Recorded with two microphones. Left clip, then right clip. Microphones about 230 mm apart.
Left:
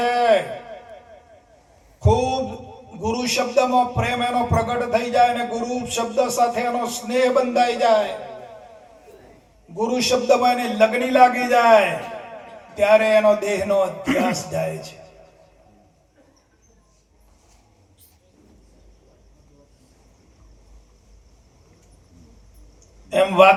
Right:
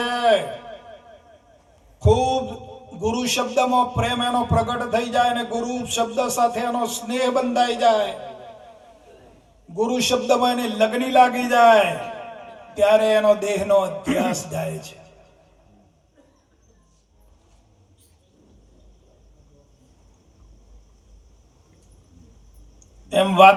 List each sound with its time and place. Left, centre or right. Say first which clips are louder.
0.0 s a sound: left 2 dB; right
2.0 s a sound: right 1 dB; right
3.0 s music: even; right
9.7 s music: left 1 dB; right
14.0 s speech: left 2 dB; centre
14.3 s music: left 2 dB; right
23.0 s a man's voice: right 1 dB; right